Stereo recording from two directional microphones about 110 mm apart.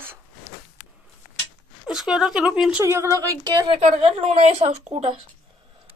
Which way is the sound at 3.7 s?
60° right (ahead or behind).